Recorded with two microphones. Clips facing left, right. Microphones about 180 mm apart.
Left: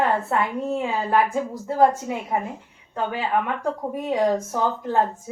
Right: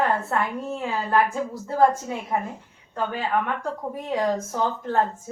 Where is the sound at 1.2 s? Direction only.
15° left (ahead or behind).